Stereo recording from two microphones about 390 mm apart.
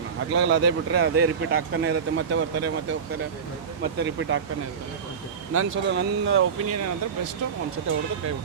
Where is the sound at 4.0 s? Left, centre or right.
Right.